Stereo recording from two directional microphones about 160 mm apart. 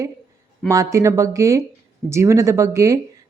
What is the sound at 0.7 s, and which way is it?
A woman's voice, 20° right (ahead or behind).